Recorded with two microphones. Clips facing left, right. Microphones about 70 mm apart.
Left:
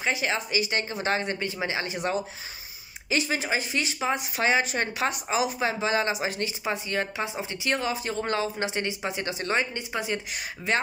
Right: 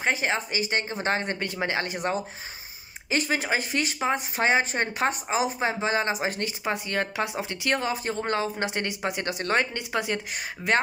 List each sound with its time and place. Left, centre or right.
0.0 s speech: right
1.4 s speech: right
8.6 s a woman's voice: right